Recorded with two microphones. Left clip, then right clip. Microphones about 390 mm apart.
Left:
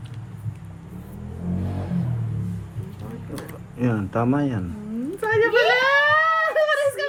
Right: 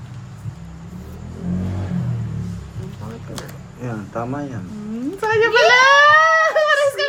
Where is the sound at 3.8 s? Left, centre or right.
Left.